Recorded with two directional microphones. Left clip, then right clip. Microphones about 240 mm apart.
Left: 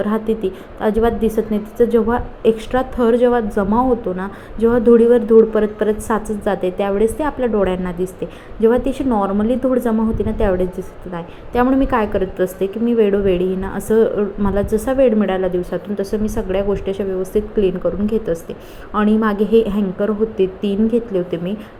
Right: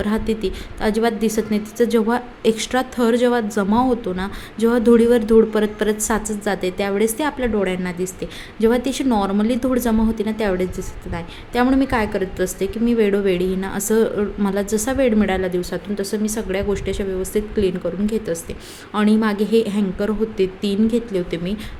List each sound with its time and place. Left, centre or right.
0.0 s a woman's voice: centre